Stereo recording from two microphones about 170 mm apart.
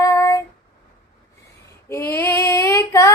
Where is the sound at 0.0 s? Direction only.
20° left (ahead or behind).